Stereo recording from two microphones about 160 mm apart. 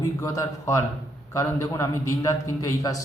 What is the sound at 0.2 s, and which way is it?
Speech, 20° left (ahead or behind).